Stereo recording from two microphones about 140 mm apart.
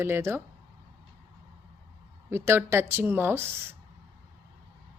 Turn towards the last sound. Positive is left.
turn(degrees=-15)  # may be behind; listen again after turning